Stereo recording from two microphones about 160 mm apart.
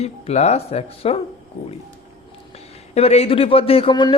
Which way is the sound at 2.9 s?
40° left (ahead or behind).